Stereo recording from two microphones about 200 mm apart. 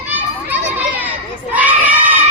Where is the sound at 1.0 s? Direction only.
10° right (ahead or behind).